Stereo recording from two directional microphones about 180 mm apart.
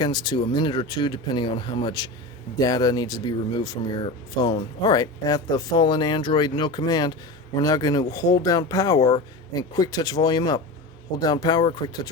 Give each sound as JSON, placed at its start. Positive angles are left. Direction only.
{"t": 0.0, "sound": "speech", "side_deg": 25}